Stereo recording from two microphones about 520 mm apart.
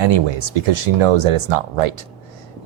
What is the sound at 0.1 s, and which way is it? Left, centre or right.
Speech, right.